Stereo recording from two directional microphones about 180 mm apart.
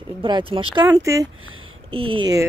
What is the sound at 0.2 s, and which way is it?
Speech, 30° right (ahead or behind).